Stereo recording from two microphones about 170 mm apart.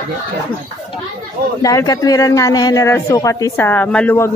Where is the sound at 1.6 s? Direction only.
20° left (ahead or behind).